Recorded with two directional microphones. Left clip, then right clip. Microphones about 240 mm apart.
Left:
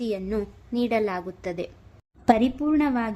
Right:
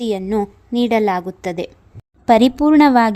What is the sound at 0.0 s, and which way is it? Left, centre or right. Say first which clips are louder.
A woman's voice: right 8 dB; right.